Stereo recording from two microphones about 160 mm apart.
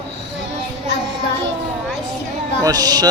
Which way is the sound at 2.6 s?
25° right (ahead or behind).